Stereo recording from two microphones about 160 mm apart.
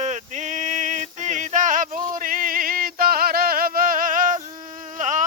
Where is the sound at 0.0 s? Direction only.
50° right (ahead or behind).